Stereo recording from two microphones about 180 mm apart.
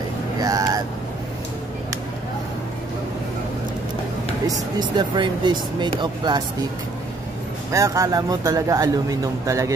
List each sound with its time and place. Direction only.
0.4 s vehicle: 20° right (ahead or behind)
4.5 s a man's voice: 25° right (ahead or behind)
7.7 s a man's voice: 20° right (ahead or behind)